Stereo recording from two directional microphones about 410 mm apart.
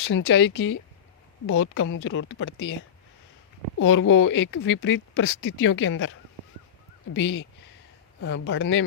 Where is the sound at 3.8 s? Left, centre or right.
Left.